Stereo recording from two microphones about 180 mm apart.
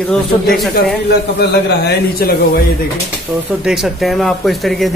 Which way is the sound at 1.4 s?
65° left (ahead or behind).